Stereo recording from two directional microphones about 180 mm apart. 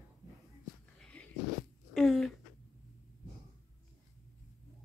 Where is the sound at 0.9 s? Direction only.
5° left (ahead or behind).